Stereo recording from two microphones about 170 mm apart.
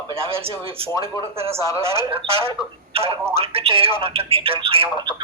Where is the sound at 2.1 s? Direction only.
35° right (ahead or behind).